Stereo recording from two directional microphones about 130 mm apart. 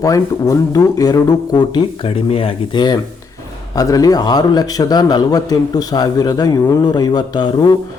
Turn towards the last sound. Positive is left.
turn(degrees=35)  # may be behind; listen again after turning